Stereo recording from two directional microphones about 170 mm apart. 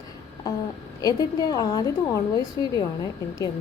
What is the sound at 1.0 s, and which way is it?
Speech, 25° left (ahead or behind).